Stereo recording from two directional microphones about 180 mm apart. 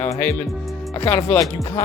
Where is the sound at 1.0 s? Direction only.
35° left (ahead or behind).